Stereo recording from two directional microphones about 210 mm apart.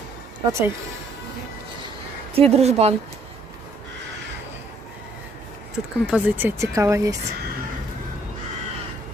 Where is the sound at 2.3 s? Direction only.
30° right (ahead or behind).